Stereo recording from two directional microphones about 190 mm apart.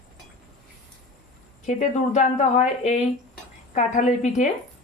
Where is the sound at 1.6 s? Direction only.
40° left (ahead or behind).